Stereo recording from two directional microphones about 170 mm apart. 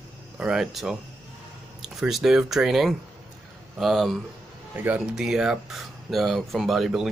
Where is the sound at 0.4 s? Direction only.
5° right (ahead or behind).